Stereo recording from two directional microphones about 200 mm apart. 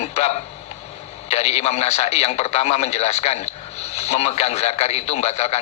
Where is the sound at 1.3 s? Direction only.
35° left (ahead or behind).